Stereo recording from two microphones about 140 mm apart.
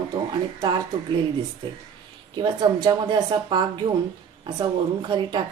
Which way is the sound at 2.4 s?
30° right (ahead or behind).